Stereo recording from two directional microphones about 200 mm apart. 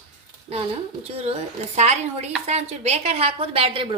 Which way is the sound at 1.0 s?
30° right (ahead or behind).